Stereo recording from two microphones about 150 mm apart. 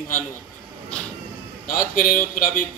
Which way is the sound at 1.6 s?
65° left (ahead or behind).